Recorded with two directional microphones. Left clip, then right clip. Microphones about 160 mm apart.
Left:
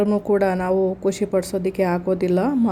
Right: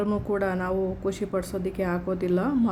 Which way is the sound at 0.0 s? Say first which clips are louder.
Left 8 dB; 15° left (ahead or behind).